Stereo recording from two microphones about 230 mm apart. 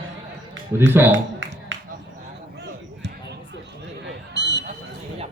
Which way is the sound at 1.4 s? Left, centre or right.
Right.